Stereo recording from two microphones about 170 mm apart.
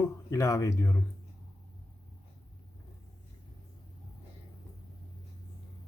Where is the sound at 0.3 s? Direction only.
20° left (ahead or behind).